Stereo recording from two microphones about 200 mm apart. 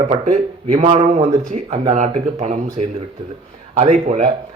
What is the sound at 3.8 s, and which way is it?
Speech, 35° right (ahead or behind).